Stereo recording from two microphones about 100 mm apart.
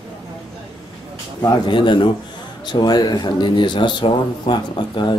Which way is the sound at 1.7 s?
55° left (ahead or behind).